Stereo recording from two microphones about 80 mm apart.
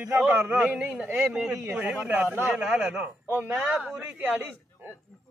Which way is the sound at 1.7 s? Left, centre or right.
Centre.